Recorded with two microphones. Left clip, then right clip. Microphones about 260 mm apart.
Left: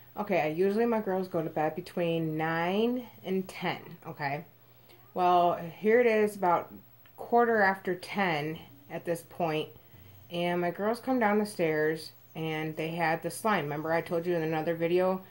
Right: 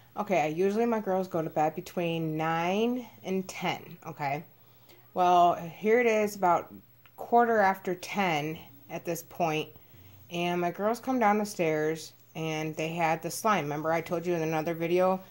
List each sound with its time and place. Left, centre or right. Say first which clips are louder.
0.1 s speech: right 1 dB; right